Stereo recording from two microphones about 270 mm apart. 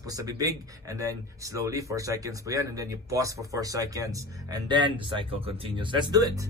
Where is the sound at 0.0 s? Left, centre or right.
Centre.